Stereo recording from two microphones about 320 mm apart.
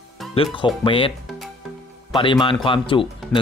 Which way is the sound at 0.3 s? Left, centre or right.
Centre.